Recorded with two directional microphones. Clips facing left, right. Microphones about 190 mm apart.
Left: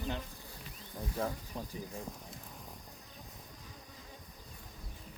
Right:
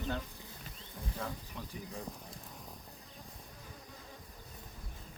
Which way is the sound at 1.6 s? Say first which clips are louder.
Left 4 dB; 35° left (ahead or behind).